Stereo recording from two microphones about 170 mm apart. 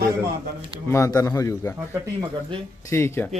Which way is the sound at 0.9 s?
15° left (ahead or behind).